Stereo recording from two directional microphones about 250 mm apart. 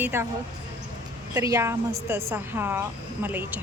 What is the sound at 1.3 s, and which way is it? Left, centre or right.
A woman's voice, centre.